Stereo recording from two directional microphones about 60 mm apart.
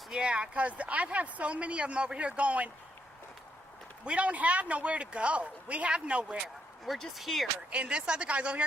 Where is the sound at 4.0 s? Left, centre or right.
Centre.